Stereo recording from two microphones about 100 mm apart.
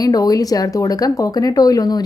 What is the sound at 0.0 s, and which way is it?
A woman's voice, 40° left (ahead or behind).